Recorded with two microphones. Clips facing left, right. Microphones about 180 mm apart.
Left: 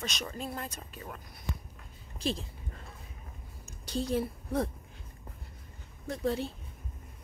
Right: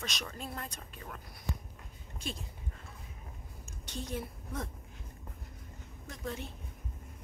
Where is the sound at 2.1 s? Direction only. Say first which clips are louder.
Left 8 dB; 35° left (ahead or behind).